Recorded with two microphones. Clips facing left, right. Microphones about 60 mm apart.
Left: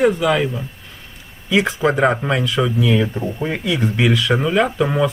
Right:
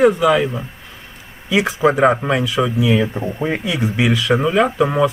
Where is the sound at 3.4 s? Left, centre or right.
Right.